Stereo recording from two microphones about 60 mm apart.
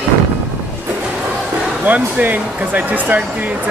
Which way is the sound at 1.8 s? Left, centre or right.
Right.